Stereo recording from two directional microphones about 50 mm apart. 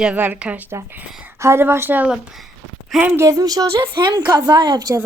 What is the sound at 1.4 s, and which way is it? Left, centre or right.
Speech, right.